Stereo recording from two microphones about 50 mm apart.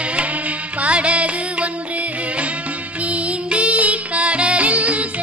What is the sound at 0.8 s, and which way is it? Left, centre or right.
Music, right.